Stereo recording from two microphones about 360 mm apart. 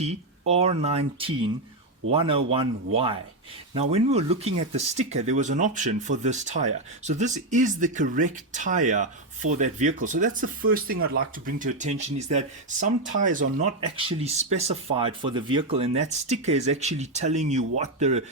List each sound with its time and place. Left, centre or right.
0.0 s speech: centre